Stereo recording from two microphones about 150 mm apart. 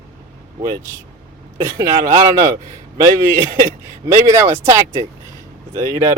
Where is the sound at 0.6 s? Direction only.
25° right (ahead or behind).